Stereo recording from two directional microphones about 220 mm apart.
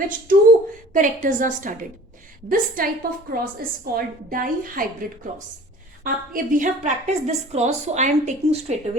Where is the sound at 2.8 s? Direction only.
40° right (ahead or behind).